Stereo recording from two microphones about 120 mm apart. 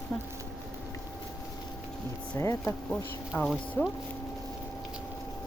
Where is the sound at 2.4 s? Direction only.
25° left (ahead or behind).